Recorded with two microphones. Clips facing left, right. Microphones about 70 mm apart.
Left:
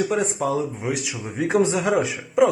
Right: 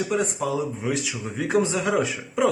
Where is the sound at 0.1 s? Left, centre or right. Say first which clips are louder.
Left 2 dB; left.